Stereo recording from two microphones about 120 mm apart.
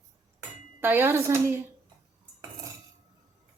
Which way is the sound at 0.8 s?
20° right (ahead or behind).